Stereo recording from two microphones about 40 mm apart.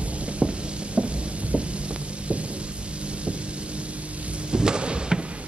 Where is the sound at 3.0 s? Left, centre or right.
Right.